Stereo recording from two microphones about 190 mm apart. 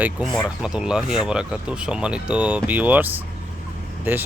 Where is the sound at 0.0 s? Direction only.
5° right (ahead or behind).